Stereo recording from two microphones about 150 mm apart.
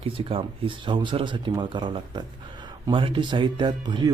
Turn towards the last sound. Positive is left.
turn(degrees=-30)  # may be behind; listen again after turning